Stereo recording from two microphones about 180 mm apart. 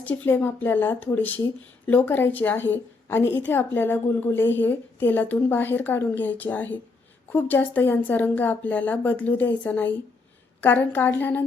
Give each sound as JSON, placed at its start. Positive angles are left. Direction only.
{"t": 0.0, "sound": "a woman's voice", "side_deg": 10}